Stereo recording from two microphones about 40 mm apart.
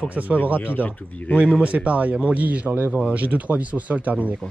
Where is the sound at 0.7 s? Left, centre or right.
Left.